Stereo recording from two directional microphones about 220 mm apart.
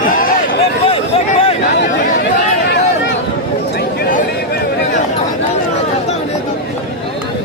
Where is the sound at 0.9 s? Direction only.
25° left (ahead or behind).